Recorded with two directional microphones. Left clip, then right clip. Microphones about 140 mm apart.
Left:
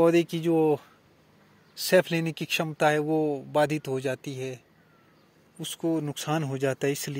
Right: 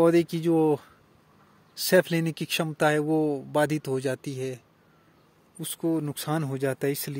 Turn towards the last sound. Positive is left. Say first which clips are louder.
# left 1 dB
turn(degrees=-35)  # may be behind; listen again after turning